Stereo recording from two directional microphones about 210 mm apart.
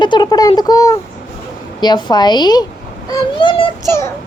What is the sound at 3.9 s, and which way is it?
Speech, 10° left (ahead or behind).